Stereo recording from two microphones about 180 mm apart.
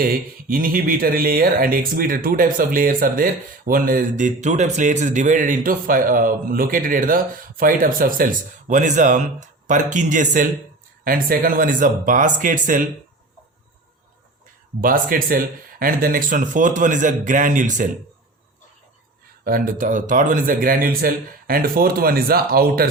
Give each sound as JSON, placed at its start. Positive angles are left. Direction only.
{"t": 0.0, "sound": "speech", "side_deg": -55}
{"t": 14.8, "sound": "speech", "side_deg": -50}
{"t": 19.5, "sound": "speech", "side_deg": -50}